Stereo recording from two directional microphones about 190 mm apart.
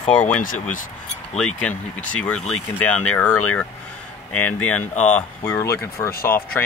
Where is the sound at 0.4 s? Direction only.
45° left (ahead or behind).